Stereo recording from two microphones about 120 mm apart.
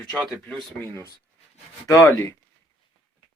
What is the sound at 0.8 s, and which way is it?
Speech, 20° left (ahead or behind).